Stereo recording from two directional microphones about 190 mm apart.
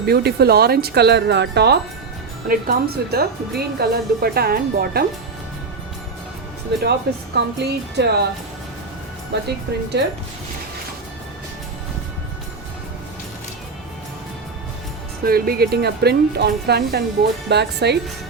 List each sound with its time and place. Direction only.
0.0 s speech: 55° right (ahead or behind)
6.7 s speech: 65° right (ahead or behind)
9.3 s speech: 60° right (ahead or behind)
15.2 s speech: 50° right (ahead or behind)